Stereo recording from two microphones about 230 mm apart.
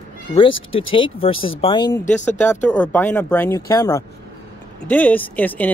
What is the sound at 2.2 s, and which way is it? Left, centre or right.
Speech, centre.